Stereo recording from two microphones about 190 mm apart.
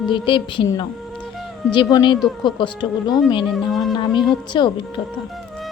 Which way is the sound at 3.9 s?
25° left (ahead or behind).